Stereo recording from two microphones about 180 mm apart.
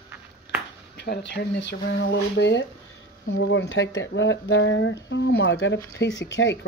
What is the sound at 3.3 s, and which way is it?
Speech, 85° left.